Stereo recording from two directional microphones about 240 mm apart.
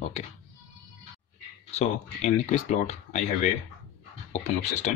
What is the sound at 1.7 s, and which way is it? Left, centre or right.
Speech, left.